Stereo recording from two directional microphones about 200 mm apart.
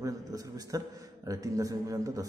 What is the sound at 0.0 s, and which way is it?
A man's voice, 15° right (ahead or behind).